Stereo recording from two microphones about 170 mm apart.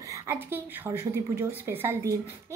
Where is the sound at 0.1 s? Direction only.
15° right (ahead or behind).